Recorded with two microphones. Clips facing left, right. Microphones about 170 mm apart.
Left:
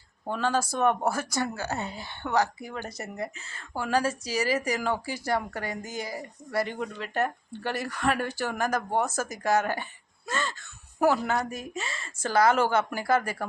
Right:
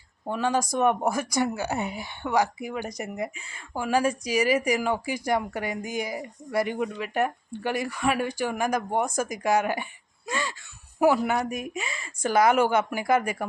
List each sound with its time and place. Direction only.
0.3 s a woman's voice: 10° right (ahead or behind)
10.2 s a sound: 15° right (ahead or behind)
11.0 s a woman's voice: 15° right (ahead or behind)